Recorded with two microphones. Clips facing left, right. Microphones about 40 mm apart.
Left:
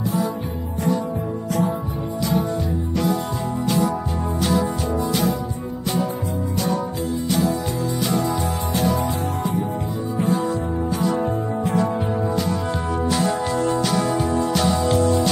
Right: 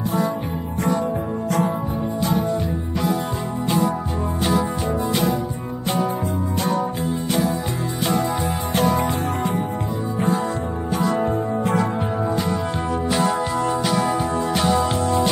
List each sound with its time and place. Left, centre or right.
3.6 s music: right
8.7 s music: right
13.1 s music: centre